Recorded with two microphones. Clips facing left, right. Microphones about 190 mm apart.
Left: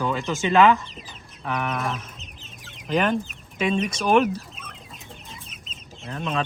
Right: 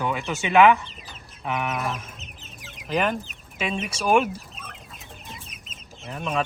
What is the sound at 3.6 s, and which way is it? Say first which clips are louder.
Speech: left 5 dB; 5° right (ahead or behind).